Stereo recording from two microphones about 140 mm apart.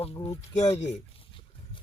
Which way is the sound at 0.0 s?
45° left (ahead or behind).